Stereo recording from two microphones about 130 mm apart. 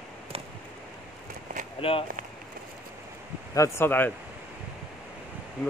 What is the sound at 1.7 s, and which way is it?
Speech, 45° left (ahead or behind).